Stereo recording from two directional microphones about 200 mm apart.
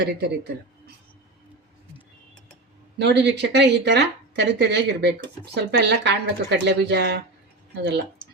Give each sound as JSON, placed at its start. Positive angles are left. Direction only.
{"t": 0.0, "sound": "speech", "side_deg": -55}
{"t": 3.0, "sound": "speech", "side_deg": -60}